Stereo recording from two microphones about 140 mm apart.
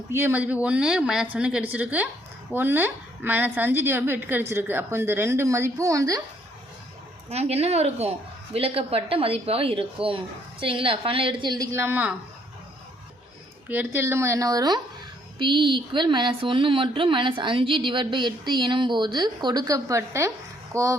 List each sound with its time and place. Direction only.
0.1 s a woman's voice: 15° right (ahead or behind)
7.3 s a woman's voice: 50° right (ahead or behind); by 12.1 s 15° right (ahead or behind)
13.7 s a woman's voice: 15° right (ahead or behind)